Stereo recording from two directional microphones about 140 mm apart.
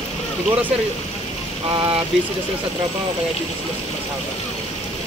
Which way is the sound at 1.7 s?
40° right (ahead or behind).